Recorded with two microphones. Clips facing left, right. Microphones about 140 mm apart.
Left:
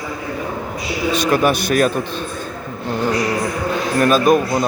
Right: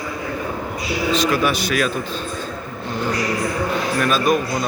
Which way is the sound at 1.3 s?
50° left (ahead or behind).